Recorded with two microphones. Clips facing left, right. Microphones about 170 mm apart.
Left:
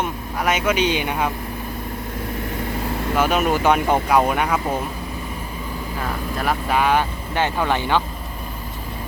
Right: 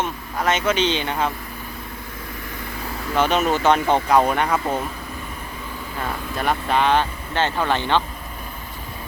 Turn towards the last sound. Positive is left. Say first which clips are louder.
# even
turn(degrees=10)  # may be behind; listen again after turning